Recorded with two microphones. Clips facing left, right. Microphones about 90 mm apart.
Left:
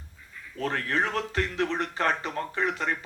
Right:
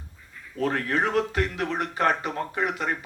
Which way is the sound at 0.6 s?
35° right (ahead or behind).